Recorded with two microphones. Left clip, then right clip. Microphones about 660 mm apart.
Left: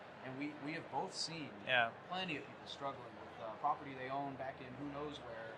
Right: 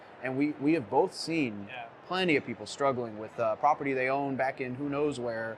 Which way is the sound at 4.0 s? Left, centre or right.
Right.